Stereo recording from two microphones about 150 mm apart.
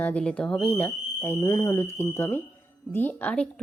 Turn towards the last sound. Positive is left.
turn(degrees=10)  # may be behind; listen again after turning